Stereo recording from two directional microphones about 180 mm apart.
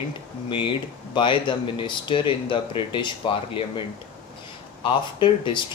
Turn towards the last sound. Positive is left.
turn(degrees=25)  # may be behind; listen again after turning